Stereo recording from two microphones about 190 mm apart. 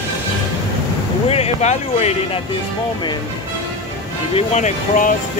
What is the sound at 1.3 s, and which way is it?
Speech, 35° left (ahead or behind).